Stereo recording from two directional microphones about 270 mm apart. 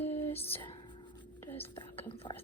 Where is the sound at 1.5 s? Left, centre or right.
Centre.